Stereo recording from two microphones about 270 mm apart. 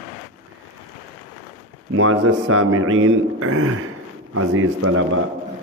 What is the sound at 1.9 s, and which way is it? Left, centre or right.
A man's voice, right.